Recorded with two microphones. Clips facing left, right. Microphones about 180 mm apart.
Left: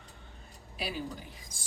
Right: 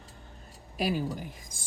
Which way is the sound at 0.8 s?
45° right (ahead or behind).